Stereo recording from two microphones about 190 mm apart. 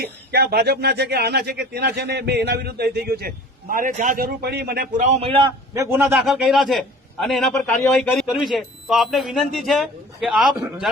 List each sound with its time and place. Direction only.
0.0 s a man's voice: 55° right (ahead or behind)
5.0 s a man's voice: 35° right (ahead or behind)
5.7 s a man's voice: 15° right (ahead or behind)